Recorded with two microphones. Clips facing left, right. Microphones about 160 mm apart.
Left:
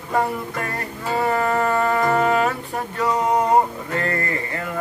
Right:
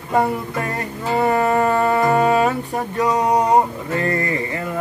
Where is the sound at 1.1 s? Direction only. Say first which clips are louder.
Right 3 dB; 20° right (ahead or behind).